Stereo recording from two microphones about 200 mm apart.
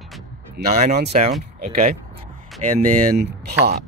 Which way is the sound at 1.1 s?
40° right (ahead or behind).